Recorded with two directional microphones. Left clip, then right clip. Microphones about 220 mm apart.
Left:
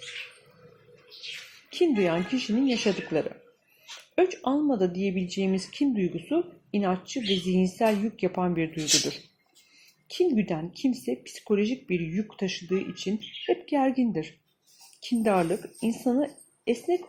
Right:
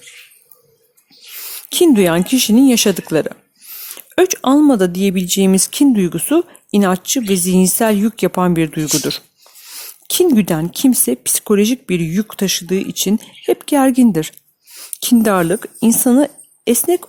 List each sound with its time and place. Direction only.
1.7 s speech: 45° right (ahead or behind)